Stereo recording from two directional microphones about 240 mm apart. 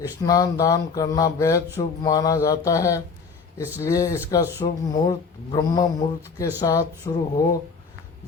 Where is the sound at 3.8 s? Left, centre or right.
Centre.